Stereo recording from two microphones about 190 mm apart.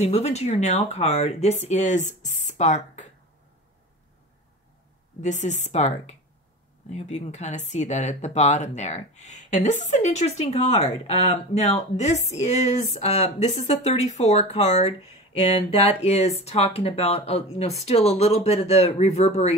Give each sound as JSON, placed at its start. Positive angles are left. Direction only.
{"t": 0.0, "sound": "speech", "side_deg": 35}
{"t": 5.2, "sound": "speech", "side_deg": 40}